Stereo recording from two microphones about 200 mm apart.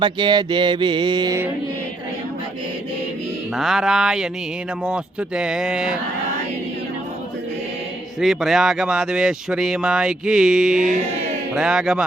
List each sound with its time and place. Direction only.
0.0 s mantra: 25° right (ahead or behind)
3.5 s speech: centre (ahead or behind)
8.2 s speech: centre (ahead or behind)